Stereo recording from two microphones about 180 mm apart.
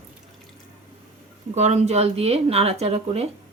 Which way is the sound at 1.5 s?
40° right (ahead or behind).